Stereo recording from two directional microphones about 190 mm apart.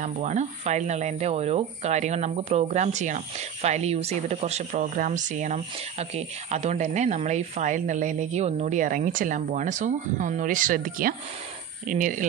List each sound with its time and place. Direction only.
0.0 s speech: 40° right (ahead or behind)